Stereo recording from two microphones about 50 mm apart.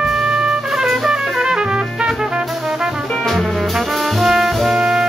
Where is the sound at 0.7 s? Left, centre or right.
Centre.